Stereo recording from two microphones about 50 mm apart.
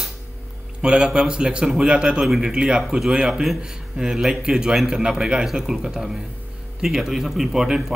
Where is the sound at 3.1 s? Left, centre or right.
Centre.